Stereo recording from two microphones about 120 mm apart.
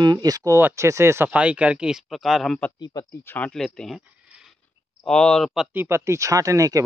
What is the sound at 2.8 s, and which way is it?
Speech, 30° left (ahead or behind).